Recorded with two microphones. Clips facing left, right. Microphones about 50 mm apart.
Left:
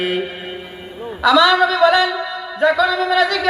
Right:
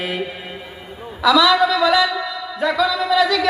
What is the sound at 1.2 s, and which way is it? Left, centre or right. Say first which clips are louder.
Speech: left 1 dB; left.